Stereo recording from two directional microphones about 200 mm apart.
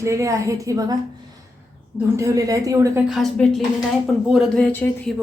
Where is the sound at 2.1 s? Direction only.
15° right (ahead or behind).